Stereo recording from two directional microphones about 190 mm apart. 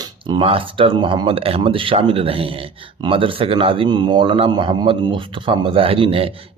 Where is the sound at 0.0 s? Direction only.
25° right (ahead or behind).